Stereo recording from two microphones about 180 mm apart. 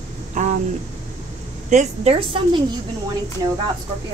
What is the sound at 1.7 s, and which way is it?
Speech, 40° right (ahead or behind).